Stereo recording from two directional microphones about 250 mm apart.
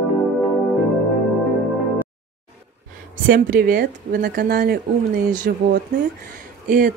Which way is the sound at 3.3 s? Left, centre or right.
Right.